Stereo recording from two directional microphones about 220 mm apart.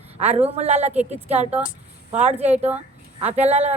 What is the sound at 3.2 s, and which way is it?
Speech, 30° right (ahead or behind).